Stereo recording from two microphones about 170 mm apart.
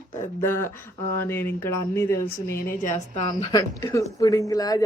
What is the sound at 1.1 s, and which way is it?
A woman's voice, 15° left (ahead or behind).